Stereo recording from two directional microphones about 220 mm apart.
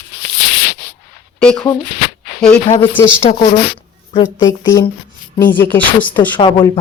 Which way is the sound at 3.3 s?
30° left (ahead or behind).